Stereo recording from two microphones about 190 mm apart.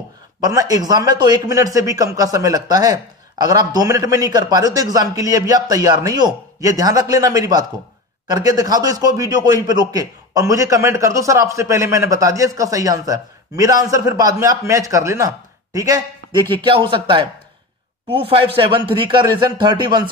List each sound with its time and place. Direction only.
0.4 s a man's voice: 20° right (ahead or behind)
18.2 s a man's voice: 30° right (ahead or behind)